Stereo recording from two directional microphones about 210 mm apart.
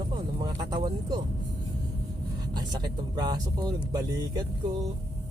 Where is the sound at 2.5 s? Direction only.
20° right (ahead or behind).